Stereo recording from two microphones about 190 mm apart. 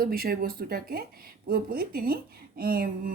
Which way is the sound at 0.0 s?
50° right (ahead or behind).